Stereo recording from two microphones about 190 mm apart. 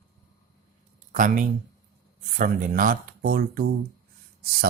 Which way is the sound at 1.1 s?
45° right (ahead or behind).